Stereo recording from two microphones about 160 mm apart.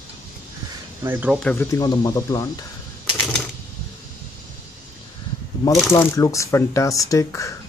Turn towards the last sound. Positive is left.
turn(degrees=20)  # may be behind; listen again after turning